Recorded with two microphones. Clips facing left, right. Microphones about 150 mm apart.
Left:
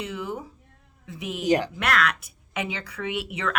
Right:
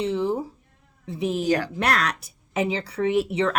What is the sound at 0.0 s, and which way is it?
Speech, 30° right (ahead or behind).